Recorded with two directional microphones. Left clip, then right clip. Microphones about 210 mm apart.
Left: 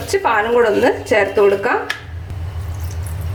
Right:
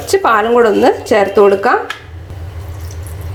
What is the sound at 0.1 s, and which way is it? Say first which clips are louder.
A woman's voice: right 5 dB; 30° right (ahead or behind).